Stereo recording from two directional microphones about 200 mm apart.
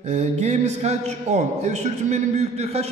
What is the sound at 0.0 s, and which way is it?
A man's voice, 35° right (ahead or behind).